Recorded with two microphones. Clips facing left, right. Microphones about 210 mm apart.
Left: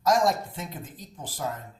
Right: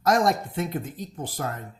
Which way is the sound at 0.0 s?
60° right (ahead or behind).